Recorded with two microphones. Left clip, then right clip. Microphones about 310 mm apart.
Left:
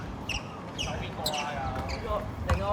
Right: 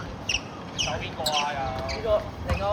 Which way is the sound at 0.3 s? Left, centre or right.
Right.